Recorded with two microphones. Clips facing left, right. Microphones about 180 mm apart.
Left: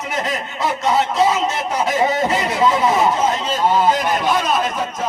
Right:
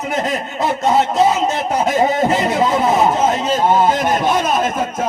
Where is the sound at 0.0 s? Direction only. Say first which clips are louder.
Right 3 dB; 40° right (ahead or behind).